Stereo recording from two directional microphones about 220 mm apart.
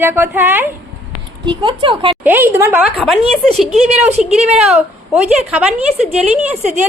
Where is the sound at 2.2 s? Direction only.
10° right (ahead or behind).